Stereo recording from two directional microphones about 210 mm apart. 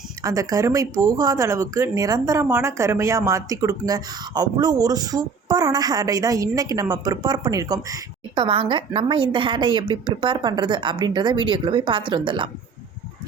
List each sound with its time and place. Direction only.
0.2 s speech: 15° right (ahead or behind)